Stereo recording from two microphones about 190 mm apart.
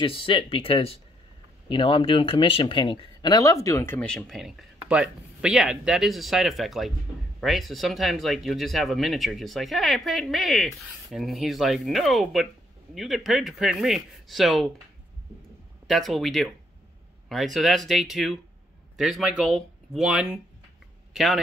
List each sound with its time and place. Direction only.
0.0 s speech: 30° left (ahead or behind); by 14.7 s centre (ahead or behind)
15.9 s speech: centre (ahead or behind)